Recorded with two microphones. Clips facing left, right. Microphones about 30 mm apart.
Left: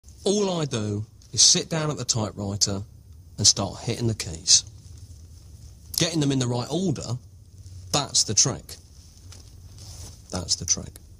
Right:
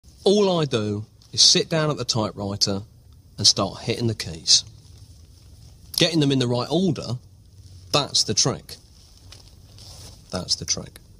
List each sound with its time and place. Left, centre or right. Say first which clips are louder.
0.2 s speech: right 5 dB; right
5.9 s a man's voice: right 4 dB; right
9.3 s a sound: right 2 dB; right